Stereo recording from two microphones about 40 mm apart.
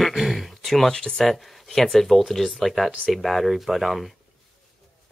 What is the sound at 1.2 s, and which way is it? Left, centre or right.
Speech, centre.